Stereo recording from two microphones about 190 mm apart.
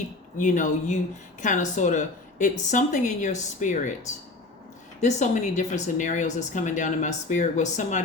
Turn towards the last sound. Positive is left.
turn(degrees=40)  # may be behind; listen again after turning